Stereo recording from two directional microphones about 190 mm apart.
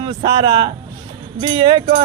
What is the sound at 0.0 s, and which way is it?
Music, 25° right (ahead or behind).